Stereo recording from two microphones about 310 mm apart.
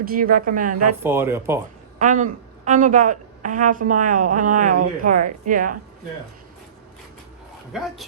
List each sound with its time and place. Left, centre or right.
0.0 s a woman's voice: right
1.0 s speech: centre
2.0 s a woman's voice: right
7.7 s a man's voice: centre